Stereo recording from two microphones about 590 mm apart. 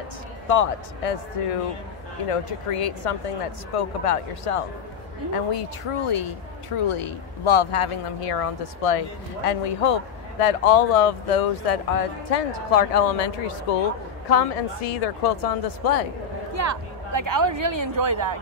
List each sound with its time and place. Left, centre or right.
0.5 s speech: left
14.3 s speech: left
16.5 s a woman's voice: right